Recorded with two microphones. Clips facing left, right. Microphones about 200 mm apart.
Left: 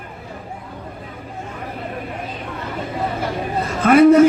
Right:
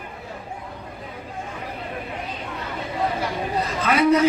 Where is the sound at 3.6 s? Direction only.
50° left (ahead or behind).